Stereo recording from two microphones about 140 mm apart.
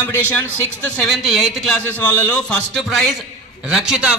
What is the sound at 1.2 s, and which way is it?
Speech, 5° right (ahead or behind).